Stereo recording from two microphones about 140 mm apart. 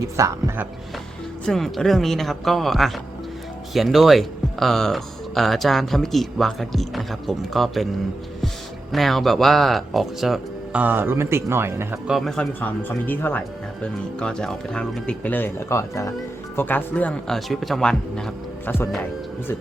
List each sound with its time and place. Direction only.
0.2 s speech: 20° right (ahead or behind)
1.5 s speech: centre (ahead or behind)
8.9 s speech: centre (ahead or behind); by 11.9 s 15° right (ahead or behind)
12.0 s speech: centre (ahead or behind)
13.1 s speech: 15° left (ahead or behind)